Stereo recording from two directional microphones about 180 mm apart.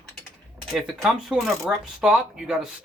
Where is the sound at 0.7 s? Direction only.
Centre (ahead or behind).